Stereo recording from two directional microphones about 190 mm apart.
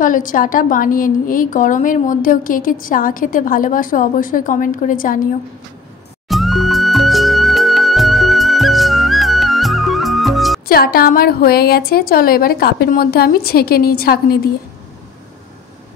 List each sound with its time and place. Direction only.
0.0 s a woman's voice: 45° left (ahead or behind)
6.2 s music: centre (ahead or behind)
10.7 s a woman's voice: 55° left (ahead or behind)